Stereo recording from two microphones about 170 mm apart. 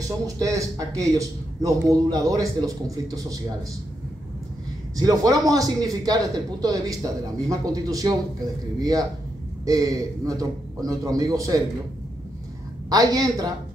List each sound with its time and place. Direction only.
0.4 s a man's voice: 20° right (ahead or behind)
4.9 s a man's voice: 20° right (ahead or behind)
12.9 s a man's voice: 20° right (ahead or behind)